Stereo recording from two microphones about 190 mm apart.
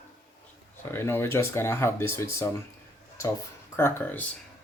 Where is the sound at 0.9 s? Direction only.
10° left (ahead or behind).